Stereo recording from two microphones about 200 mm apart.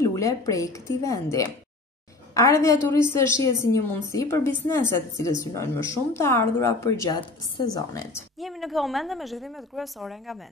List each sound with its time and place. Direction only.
0.0 s speech: 15° left (ahead or behind)
8.4 s a woman's voice: centre (ahead or behind)